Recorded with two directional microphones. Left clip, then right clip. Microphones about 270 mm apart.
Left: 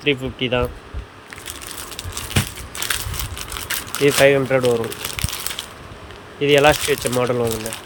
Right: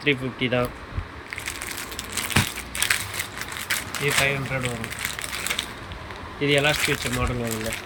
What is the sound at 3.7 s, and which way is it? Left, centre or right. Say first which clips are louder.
Crumpling: left 7 dB; centre.